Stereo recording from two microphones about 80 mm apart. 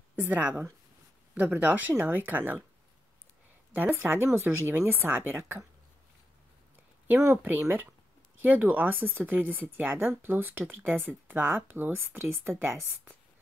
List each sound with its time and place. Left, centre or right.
0.1 s speech: right
3.7 s speech: right
7.1 s speech: right